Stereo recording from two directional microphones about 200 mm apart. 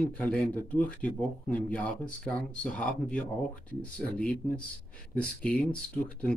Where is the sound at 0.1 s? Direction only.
5° left (ahead or behind).